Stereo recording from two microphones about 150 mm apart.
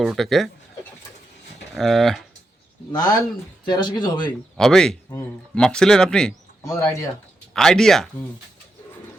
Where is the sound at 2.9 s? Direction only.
25° left (ahead or behind).